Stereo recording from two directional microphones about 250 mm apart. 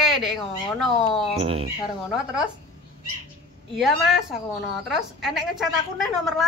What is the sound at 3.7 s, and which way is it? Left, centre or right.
A woman's voice, centre.